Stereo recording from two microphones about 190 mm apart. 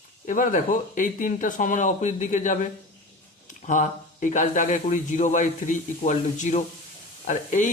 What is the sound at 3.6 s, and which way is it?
A man's voice, 40° left (ahead or behind).